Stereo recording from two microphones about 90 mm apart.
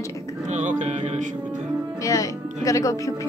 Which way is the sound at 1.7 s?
35° right (ahead or behind).